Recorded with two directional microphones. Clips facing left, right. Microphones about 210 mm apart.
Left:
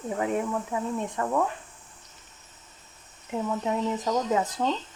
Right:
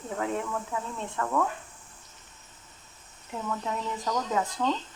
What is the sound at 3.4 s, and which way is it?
Speech, 20° left (ahead or behind).